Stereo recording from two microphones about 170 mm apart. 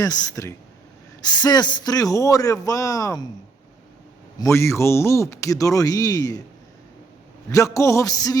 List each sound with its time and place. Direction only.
0.0 s speech: 20° left (ahead or behind)
4.4 s speech: 15° left (ahead or behind)
7.5 s music: 15° left (ahead or behind)